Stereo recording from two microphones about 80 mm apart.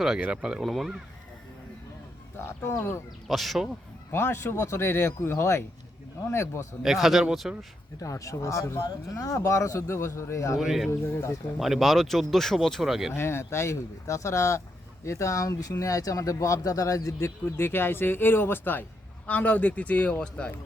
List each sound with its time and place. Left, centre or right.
0.2 s speech: centre
0.6 s speech: centre
2.5 s speech: left
3.2 s speech: centre
4.1 s speech: left
6.8 s speech: centre
8.0 s speech: left
10.6 s speech: centre
11.0 s speech: left
11.6 s speech: centre
13.1 s a man's voice: left; by 20.5 s centre